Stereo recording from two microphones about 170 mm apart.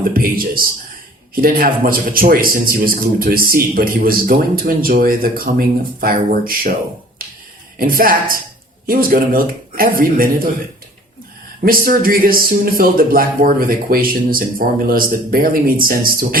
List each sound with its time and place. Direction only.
0.1 s a man's voice: 60° right (ahead or behind)
7.2 s finger snapping: 60° right (ahead or behind)
7.8 s a man's voice: 60° right (ahead or behind)
11.6 s a man's voice: 55° right (ahead or behind)